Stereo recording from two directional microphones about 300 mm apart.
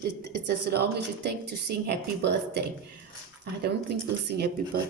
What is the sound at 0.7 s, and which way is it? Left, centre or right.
Speech, right.